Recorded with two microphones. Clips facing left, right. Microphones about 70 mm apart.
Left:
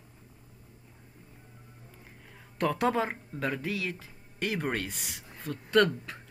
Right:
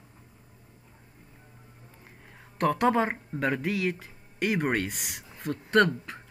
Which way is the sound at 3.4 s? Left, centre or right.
Right.